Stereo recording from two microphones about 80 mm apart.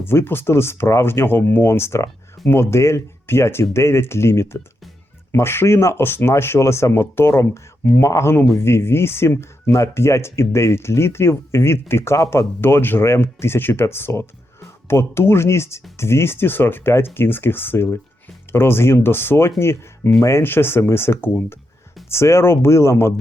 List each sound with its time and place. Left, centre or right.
0.0 s speech: left